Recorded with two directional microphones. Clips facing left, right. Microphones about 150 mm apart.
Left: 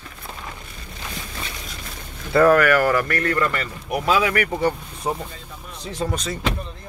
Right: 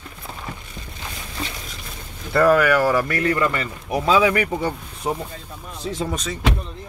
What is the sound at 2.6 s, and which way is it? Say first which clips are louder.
Speech: even; 15° right (ahead or behind).